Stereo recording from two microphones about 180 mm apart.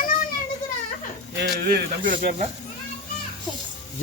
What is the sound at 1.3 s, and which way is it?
Speech, 60° right (ahead or behind).